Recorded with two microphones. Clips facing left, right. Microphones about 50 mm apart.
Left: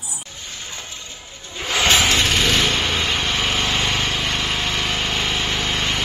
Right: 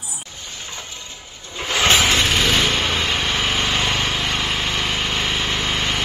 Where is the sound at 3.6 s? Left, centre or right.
Centre.